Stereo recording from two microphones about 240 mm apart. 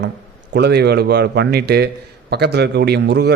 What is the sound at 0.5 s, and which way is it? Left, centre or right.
A man's voice, right.